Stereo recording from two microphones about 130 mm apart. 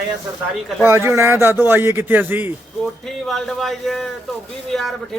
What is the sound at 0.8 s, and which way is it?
Speech, 20° right (ahead or behind).